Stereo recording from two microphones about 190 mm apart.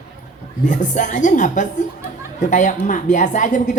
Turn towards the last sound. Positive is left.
turn(degrees=40)  # may be behind; listen again after turning